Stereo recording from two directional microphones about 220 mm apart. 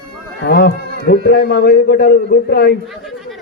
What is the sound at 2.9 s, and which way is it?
Chatter, centre (ahead or behind).